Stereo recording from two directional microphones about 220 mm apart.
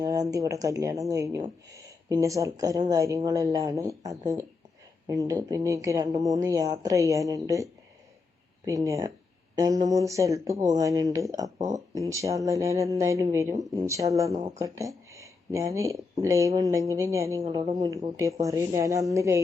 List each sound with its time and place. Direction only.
0.0 s speech: 15° right (ahead or behind)